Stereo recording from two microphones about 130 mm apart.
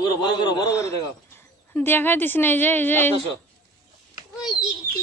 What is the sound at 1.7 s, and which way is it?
A woman's voice, 15° left (ahead or behind).